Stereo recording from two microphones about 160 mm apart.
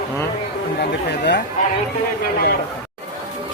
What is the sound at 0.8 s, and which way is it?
Speech, 90° left.